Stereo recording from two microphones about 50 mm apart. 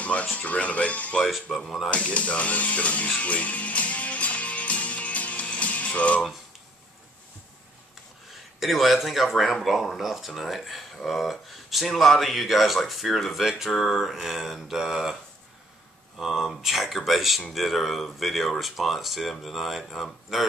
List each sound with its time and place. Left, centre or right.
0.0 s speech: left
1.2 s speech: centre
1.9 s speech: left
3.2 s music: left
8.5 s speech: centre
16.2 s speech: centre